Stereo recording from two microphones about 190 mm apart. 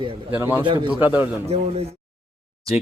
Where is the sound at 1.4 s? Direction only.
35° right (ahead or behind).